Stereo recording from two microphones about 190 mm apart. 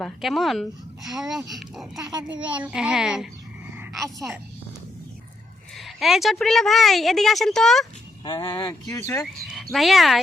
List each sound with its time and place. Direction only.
0.0 s a woman's voice: centre (ahead or behind)
5.7 s a woman's voice: centre (ahead or behind)
8.2 s speech: 25° left (ahead or behind)
9.0 s speech: 15° left (ahead or behind)
9.2 s a sound: centre (ahead or behind)
9.7 s a woman's voice: centre (ahead or behind)